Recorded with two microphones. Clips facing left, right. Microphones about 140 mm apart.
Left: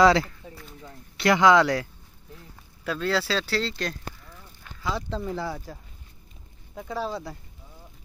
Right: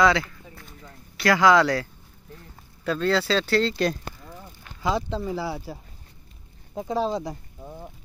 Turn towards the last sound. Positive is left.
turn(degrees=-55)  # may be behind; listen again after turning